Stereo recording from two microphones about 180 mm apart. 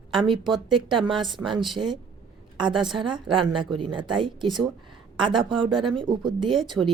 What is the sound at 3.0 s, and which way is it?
Speech, 25° right (ahead or behind).